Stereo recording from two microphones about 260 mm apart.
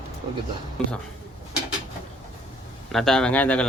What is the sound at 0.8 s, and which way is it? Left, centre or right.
Speech, centre.